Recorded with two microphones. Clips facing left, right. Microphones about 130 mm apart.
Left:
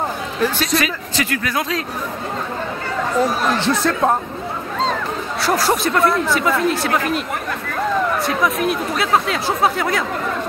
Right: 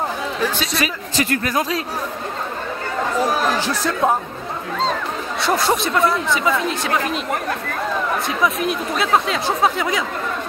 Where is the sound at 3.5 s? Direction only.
10° right (ahead or behind).